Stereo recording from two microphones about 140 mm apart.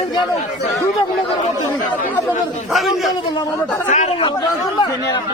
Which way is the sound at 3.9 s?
55° left (ahead or behind).